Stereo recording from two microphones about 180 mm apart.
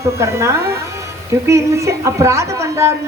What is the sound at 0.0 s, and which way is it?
A woman's voice, 15° right (ahead or behind).